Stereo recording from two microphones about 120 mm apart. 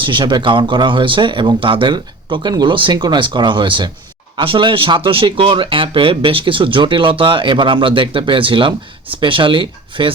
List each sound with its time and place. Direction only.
0.0 s speech: 40° right (ahead or behind)